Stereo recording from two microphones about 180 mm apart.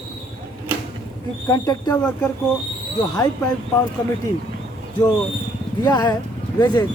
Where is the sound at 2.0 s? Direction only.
5° left (ahead or behind).